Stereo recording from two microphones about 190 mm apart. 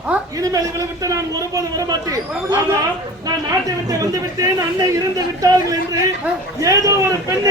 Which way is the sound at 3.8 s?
20° right (ahead or behind).